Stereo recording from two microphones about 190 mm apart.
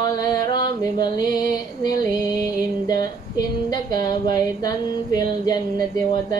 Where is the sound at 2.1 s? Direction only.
20° left (ahead or behind).